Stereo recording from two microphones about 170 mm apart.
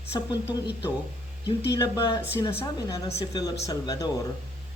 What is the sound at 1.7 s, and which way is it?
Speech, 25° left (ahead or behind).